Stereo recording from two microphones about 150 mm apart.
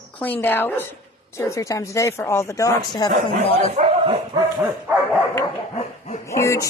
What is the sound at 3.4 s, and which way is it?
Speech, 40° left (ahead or behind).